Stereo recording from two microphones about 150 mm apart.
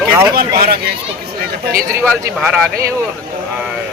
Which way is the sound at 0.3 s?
90° right.